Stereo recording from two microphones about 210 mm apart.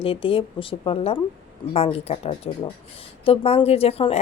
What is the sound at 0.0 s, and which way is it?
A woman's voice, 25° left (ahead or behind).